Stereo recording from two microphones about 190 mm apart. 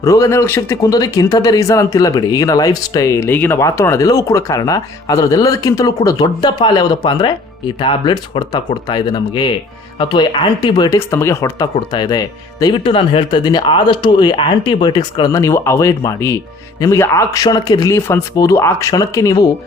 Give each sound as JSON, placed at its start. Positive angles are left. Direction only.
{"t": 0.0, "sound": "speech", "side_deg": 15}